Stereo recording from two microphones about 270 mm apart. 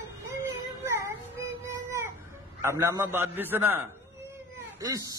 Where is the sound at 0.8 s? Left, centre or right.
Centre.